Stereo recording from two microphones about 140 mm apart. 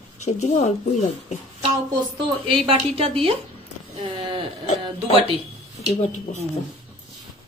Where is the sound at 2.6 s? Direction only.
40° right (ahead or behind).